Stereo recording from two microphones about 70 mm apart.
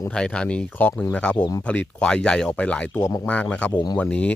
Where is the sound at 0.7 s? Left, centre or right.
Left.